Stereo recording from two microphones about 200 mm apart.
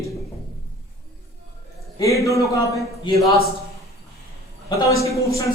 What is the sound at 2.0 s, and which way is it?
A man's voice, 15° left (ahead or behind).